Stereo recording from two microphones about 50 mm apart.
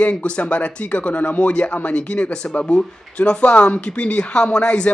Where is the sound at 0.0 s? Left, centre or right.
Left.